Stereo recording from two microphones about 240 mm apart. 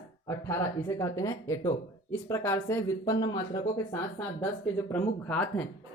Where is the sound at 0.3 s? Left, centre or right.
Centre.